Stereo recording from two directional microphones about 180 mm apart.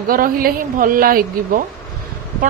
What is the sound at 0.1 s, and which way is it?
A woman's voice, 50° right (ahead or behind).